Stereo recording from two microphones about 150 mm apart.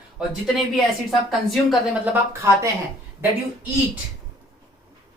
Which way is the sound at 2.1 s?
15° right (ahead or behind).